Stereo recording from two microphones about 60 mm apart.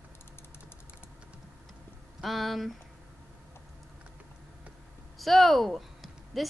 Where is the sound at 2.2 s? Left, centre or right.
Centre.